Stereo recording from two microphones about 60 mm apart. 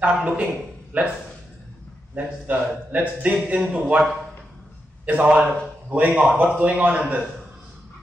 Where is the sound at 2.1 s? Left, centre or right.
Right.